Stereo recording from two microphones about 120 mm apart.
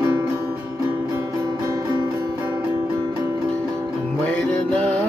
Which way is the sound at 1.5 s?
35° right (ahead or behind).